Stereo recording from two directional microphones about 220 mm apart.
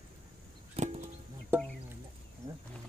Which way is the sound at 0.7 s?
30° right (ahead or behind).